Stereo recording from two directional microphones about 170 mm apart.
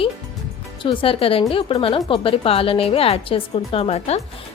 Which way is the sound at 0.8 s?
30° left (ahead or behind).